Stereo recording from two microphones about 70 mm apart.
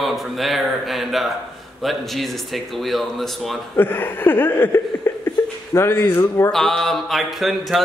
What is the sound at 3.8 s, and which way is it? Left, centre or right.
Chuckle, left.